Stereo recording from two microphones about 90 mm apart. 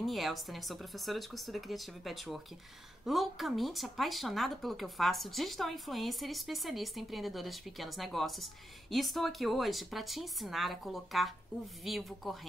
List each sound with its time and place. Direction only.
0.0 s speech: centre (ahead or behind)